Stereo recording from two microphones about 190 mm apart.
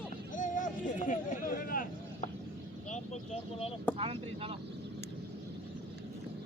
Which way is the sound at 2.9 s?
40° left (ahead or behind).